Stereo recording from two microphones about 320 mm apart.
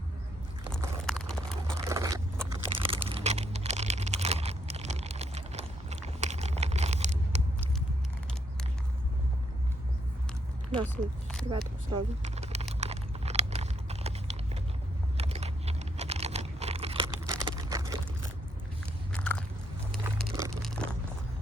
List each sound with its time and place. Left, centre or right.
1.0 s a sound: centre
1.8 s a sound: centre
10.8 s speech: centre
11.5 s speech: centre
12.8 s chewing: centre
15.2 s computer keyboard: centre
19.1 s biting: centre
20.2 s a sound: centre
20.6 s crunch: centre